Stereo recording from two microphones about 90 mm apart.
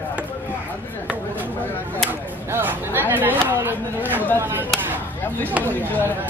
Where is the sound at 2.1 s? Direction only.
20° right (ahead or behind).